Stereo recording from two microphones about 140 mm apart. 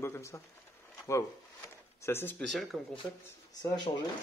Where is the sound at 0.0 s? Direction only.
20° left (ahead or behind).